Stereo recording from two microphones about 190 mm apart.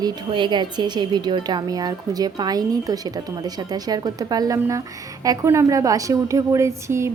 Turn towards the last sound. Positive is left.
turn(degrees=-15)  # may be behind; listen again after turning